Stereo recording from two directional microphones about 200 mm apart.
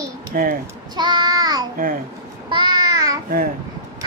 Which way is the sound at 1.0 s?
20° right (ahead or behind).